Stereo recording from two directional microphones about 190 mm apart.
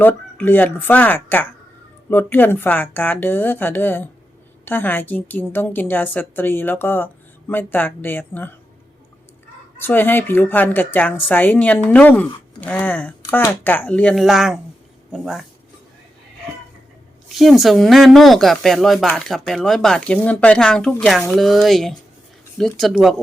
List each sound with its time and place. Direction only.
0.0 s a woman's voice: 10° left (ahead or behind)
9.7 s a woman's voice: 10° left (ahead or behind)
17.2 s speech: centre (ahead or behind)